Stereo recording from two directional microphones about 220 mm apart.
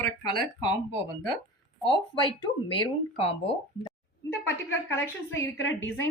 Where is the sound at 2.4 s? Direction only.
25° left (ahead or behind).